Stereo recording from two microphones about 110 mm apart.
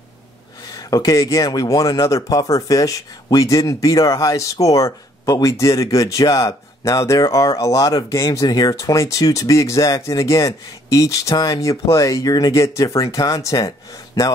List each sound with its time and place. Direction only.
0.8 s speech: 35° left (ahead or behind)